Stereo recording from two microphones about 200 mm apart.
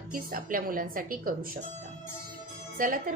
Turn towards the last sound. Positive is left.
turn(degrees=-45)  # may be behind; listen again after turning